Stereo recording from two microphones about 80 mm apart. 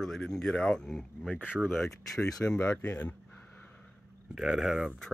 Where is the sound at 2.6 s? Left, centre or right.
Centre.